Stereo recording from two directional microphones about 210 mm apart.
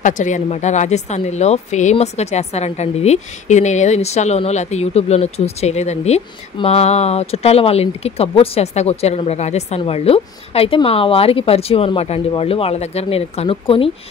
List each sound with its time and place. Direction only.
0.0 s speech: 35° left (ahead or behind)